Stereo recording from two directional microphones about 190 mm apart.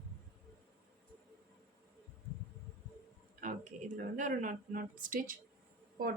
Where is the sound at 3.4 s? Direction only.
40° right (ahead or behind).